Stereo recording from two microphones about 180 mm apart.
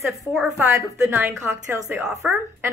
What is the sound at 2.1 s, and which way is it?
Speech, centre (ahead or behind).